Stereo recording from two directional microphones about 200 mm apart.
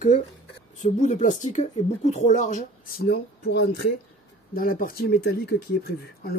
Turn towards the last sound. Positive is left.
turn(degrees=50)  # may be behind; listen again after turning